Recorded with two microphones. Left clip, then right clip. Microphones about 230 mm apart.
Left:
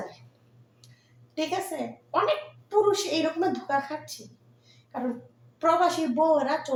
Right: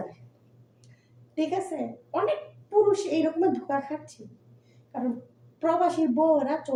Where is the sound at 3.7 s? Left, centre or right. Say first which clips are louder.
Left 2 dB; left.